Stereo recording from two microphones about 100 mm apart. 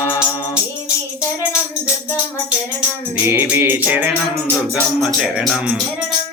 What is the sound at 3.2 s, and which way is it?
Music, 20° right (ahead or behind).